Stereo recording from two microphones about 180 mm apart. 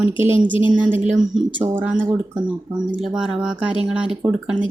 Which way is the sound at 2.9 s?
5° right (ahead or behind).